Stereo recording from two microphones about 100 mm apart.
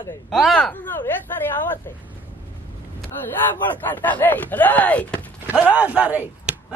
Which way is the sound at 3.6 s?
20° left (ahead or behind).